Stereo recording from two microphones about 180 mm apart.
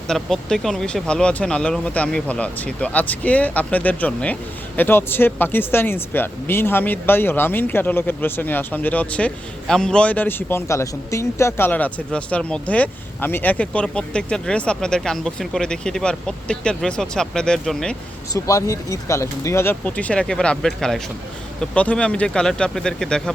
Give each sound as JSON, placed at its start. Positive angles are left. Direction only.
{"t": 0.1, "sound": "speech", "side_deg": 5}
{"t": 18.3, "sound": "speech", "side_deg": 15}